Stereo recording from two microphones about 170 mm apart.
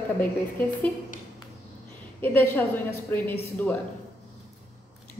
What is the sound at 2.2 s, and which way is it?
A woman's voice, 10° left (ahead or behind).